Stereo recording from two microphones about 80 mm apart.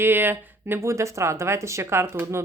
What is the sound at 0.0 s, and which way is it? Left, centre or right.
Speech, right.